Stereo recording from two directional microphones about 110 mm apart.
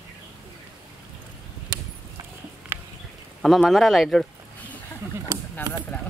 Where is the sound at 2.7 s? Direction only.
25° right (ahead or behind).